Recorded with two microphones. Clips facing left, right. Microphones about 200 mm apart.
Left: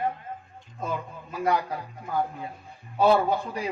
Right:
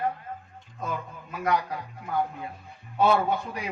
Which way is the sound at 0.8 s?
30° left (ahead or behind).